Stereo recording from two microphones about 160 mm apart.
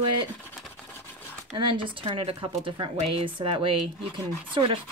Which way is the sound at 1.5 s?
30° right (ahead or behind).